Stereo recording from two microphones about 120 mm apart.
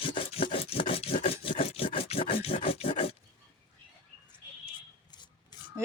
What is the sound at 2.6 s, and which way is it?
Rub, 55° left (ahead or behind).